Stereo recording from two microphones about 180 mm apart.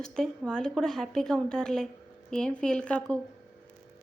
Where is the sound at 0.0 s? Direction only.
5° left (ahead or behind).